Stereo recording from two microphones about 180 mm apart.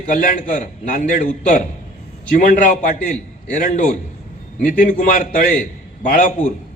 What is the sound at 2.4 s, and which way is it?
A man's voice, 45° left (ahead or behind).